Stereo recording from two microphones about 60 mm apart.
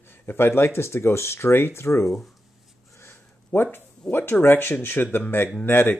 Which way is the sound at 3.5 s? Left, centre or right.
Left.